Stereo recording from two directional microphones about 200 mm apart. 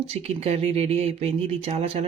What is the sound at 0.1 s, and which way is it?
Speech, 30° right (ahead or behind).